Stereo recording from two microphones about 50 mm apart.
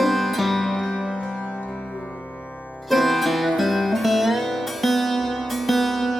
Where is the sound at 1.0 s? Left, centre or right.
Right.